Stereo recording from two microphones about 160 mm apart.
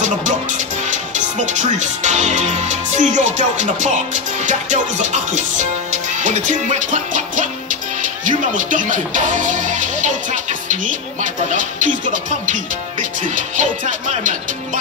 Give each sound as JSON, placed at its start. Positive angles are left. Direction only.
{"t": 0.8, "sound": "speech", "side_deg": -50}
{"t": 13.6, "sound": "speech", "side_deg": -50}